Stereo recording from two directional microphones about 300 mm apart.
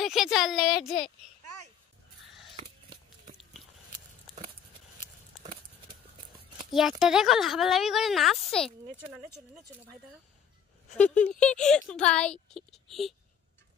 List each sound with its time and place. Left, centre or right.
0.0 s speech: centre
6.7 s speech: centre
11.2 s speech: left
11.6 s speech: centre